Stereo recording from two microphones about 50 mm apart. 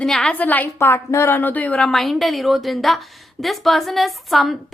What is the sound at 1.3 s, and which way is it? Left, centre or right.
Speech, left.